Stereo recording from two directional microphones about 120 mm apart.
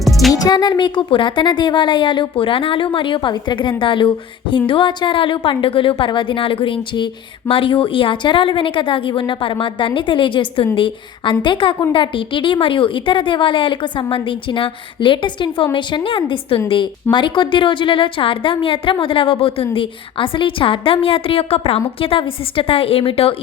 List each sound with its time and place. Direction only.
0.0 s music: centre (ahead or behind)
0.4 s speech: 35° left (ahead or behind)